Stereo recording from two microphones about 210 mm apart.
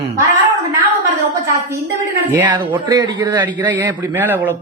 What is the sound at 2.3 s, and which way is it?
Speech, 10° right (ahead or behind).